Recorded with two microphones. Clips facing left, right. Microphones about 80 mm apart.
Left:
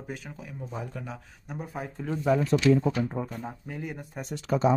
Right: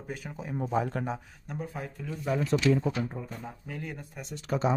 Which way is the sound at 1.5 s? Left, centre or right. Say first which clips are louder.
Left 1 dB; centre.